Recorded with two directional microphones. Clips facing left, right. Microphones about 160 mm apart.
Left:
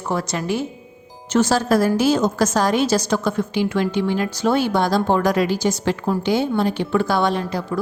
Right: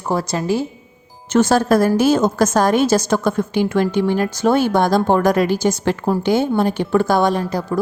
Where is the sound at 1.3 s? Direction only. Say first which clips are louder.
Right 3 dB; 55° right (ahead or behind).